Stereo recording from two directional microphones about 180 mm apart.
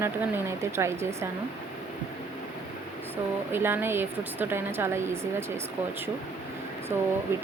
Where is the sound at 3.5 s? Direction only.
10° right (ahead or behind).